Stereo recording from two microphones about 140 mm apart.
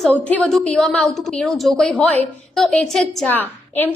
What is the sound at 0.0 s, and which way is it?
A woman's voice, 10° left (ahead or behind).